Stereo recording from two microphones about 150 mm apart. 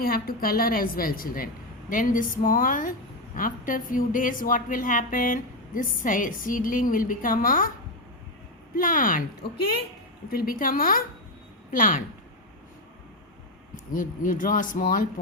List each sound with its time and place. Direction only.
0.0 s a woman's voice: 80° left
8.7 s a woman's voice: 65° left (ahead or behind)
10.2 s a woman's voice: 80° left; by 12.0 s 65° left (ahead or behind)
13.7 s a woman's voice: 60° left (ahead or behind)